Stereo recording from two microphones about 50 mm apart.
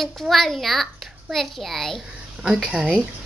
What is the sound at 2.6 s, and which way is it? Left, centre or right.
Speech, right.